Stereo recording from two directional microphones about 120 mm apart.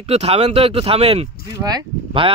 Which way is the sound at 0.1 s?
60° right (ahead or behind).